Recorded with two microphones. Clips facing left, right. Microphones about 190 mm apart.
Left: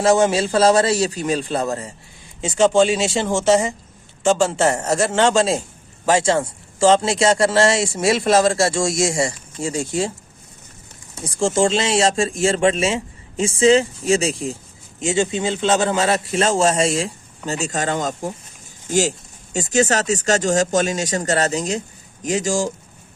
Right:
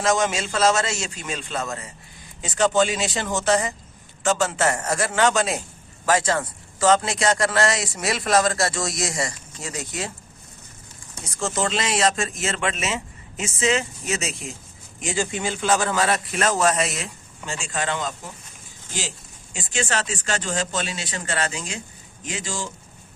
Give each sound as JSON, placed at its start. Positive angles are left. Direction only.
{"t": 0.0, "sound": "speech", "side_deg": 30}
{"t": 4.2, "sound": "a man's voice", "side_deg": 30}
{"t": 11.2, "sound": "a man's voice", "side_deg": 30}